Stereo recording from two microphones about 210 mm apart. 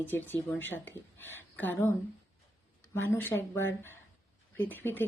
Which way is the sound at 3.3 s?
65° left (ahead or behind).